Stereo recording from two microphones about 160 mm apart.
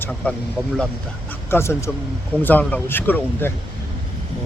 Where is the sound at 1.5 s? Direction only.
15° left (ahead or behind).